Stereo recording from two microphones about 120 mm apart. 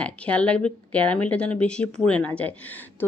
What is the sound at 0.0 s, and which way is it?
Speech, 10° left (ahead or behind).